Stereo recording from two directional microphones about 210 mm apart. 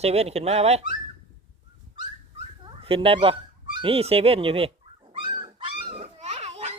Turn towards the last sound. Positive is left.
turn(degrees=-30)  # may be behind; listen again after turning